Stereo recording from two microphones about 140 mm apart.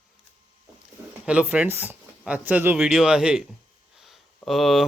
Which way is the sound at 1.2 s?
10° right (ahead or behind).